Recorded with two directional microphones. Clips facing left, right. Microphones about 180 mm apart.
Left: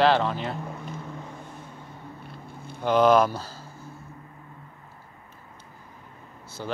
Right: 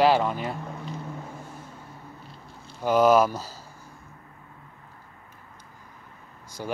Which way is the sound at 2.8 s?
10° right (ahead or behind).